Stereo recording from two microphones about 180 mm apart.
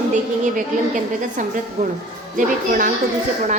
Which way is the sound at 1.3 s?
45° right (ahead or behind).